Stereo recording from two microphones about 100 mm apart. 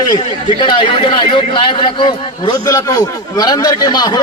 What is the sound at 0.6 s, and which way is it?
A man's voice, 55° left (ahead or behind).